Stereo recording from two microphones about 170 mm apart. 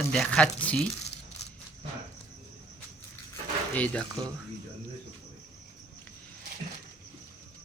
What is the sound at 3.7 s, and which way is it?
Speech, 5° left (ahead or behind).